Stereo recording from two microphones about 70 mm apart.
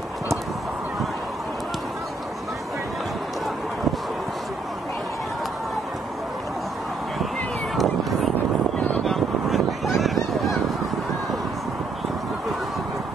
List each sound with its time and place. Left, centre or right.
7.7 s vehicle: centre
8.7 s vehicle: left
9.0 s honk: centre